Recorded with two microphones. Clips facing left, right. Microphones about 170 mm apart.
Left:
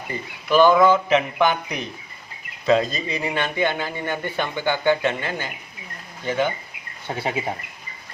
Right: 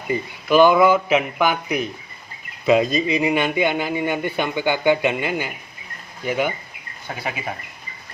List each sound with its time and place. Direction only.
0.1 s a man's voice: 15° right (ahead or behind)
7.2 s speech: 30° left (ahead or behind)